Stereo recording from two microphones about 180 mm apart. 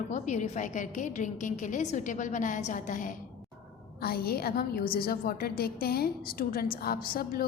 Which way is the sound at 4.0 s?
60° left (ahead or behind).